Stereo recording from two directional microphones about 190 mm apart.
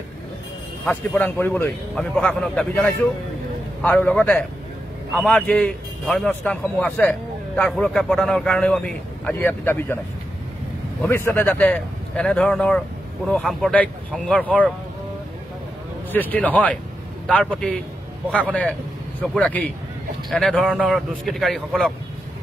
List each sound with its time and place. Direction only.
0.8 s a man's voice: 10° left (ahead or behind)
11.0 s a man's voice: 10° left (ahead or behind)
16.1 s a man's voice: 10° left (ahead or behind)